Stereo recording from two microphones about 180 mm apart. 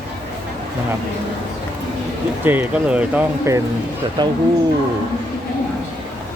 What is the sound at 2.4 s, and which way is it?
Speech, 10° right (ahead or behind).